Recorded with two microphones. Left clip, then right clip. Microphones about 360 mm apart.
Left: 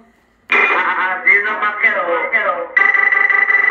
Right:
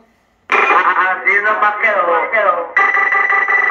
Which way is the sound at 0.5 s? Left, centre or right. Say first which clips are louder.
Right 3 dB; right.